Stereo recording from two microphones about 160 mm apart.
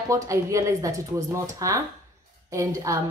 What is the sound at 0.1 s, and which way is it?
A woman's voice, 20° right (ahead or behind).